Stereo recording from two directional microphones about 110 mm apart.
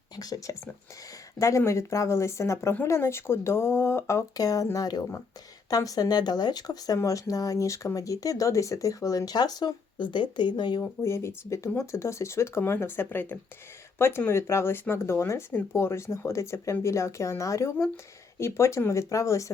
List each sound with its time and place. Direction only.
0.2 s speech: 35° left (ahead or behind)
10.8 s speech: 25° left (ahead or behind)